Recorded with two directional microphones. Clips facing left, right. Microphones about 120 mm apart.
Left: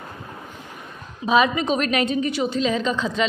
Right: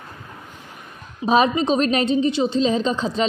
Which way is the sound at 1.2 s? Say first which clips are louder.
Right 2 dB; 35° right (ahead or behind).